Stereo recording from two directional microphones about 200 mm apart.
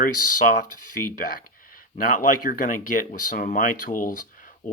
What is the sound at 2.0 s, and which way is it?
Speech, 45° left (ahead or behind).